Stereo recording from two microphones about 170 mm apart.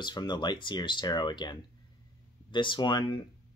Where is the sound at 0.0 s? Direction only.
25° left (ahead or behind).